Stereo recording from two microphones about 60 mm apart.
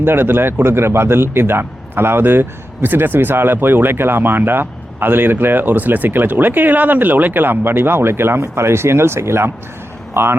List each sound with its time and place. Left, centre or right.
0.0 s a man's voice: right